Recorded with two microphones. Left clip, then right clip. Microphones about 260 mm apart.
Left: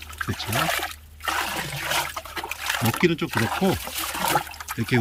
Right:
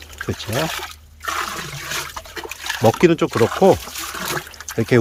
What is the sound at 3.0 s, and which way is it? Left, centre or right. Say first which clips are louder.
Speech: right 7 dB; centre.